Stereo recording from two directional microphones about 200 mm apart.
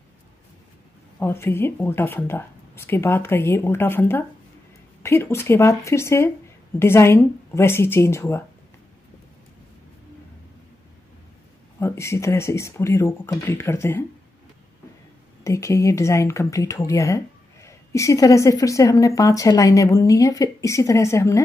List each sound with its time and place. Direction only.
1.2 s speech: 10° left (ahead or behind)
11.8 s speech: 15° left (ahead or behind)
15.4 s speech: 15° left (ahead or behind)